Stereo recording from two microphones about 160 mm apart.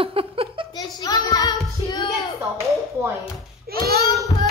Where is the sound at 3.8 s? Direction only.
75° right (ahead or behind).